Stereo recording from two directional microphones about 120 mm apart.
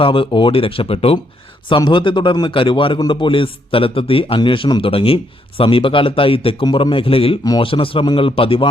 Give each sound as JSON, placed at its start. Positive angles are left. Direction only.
{"t": 0.0, "sound": "a man's voice", "side_deg": 45}
{"t": 1.7, "sound": "a man's voice", "side_deg": 40}